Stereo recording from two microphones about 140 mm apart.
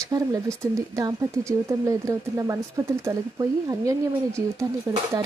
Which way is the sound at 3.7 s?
25° right (ahead or behind).